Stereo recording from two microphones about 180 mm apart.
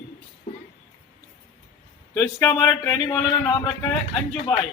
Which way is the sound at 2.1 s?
15° left (ahead or behind).